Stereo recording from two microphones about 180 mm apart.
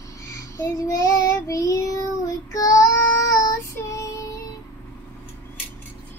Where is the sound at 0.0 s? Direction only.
15° left (ahead or behind).